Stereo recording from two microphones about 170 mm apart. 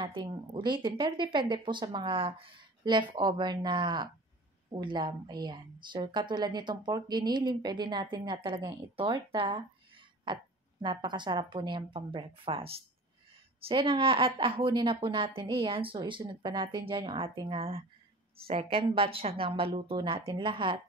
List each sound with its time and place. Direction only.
0.0 s a woman's voice: 30° right (ahead or behind)